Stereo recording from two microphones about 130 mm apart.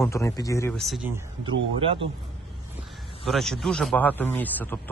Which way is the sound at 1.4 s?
45° right (ahead or behind).